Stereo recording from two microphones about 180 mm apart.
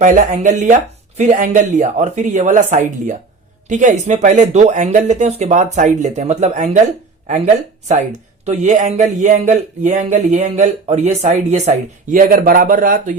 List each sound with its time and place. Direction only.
0.0 s speech: 45° right (ahead or behind)